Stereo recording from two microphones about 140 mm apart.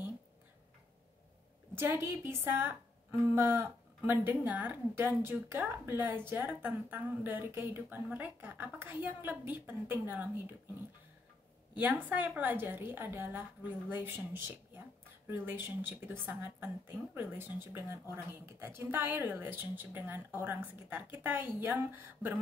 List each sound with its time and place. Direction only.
1.8 s a woman's voice: 15° right (ahead or behind)
11.7 s a woman's voice: 10° right (ahead or behind)
15.2 s a woman's voice: 15° right (ahead or behind)